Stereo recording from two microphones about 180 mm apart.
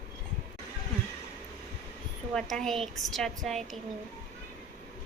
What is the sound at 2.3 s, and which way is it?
A woman's voice, centre (ahead or behind).